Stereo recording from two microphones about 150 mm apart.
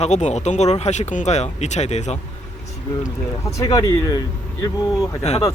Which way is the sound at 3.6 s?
25° left (ahead or behind).